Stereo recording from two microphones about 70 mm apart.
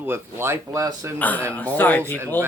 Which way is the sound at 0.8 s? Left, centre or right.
Right.